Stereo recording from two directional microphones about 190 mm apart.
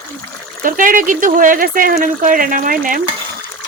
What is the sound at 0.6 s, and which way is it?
Speech, 45° right (ahead or behind).